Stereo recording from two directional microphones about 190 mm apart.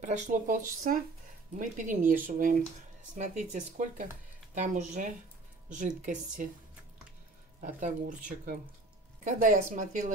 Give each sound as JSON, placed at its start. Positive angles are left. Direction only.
{"t": 0.0, "sound": "speech", "side_deg": -40}
{"t": 7.6, "sound": "speech", "side_deg": -40}